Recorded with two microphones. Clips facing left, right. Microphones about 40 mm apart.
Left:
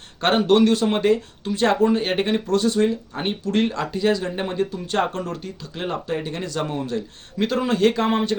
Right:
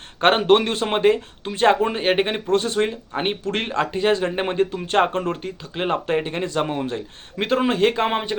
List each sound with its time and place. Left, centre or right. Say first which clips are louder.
0.2 s speech: right 1 dB; right